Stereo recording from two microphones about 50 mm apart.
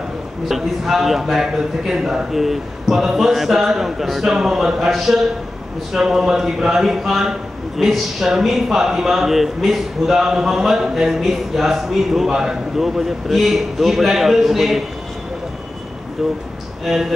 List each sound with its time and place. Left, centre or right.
0.5 s a man's voice: centre
16.8 s speech: centre